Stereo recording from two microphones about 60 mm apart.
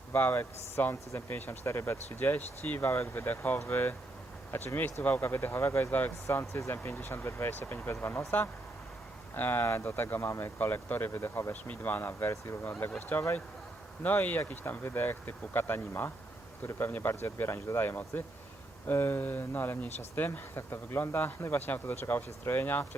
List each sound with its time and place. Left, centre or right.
0.1 s speech: left
2.0 s speech: left
5.2 s speech: left
6.2 s speech: left
6.8 s speech: left
10.2 s speech: left
10.4 s speech: left